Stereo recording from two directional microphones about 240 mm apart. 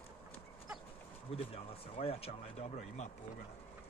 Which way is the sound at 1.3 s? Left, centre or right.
Left.